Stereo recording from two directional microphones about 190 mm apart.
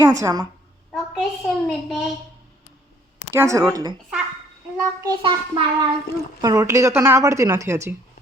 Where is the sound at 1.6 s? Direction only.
Centre (ahead or behind).